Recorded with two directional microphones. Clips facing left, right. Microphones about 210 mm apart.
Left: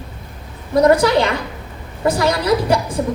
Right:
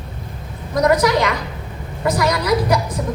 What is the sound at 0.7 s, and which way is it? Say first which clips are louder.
A woman's voice: left 3 dB; 30° left (ahead or behind).